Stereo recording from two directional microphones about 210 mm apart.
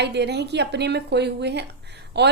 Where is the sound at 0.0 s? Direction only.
55° right (ahead or behind).